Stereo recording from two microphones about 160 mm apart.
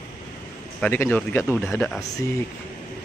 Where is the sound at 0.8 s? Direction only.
10° left (ahead or behind).